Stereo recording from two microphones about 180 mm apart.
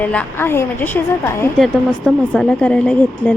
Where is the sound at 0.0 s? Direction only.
10° left (ahead or behind).